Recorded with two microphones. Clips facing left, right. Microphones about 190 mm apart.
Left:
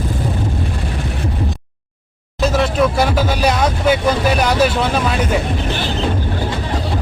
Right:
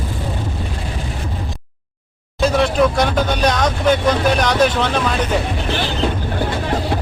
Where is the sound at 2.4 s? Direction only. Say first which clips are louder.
Even; centre (ahead or behind).